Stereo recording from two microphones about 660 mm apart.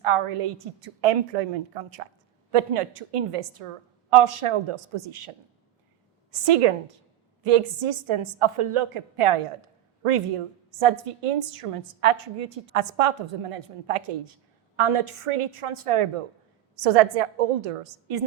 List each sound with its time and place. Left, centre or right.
0.0 s a woman's voice: right
6.4 s a woman's voice: right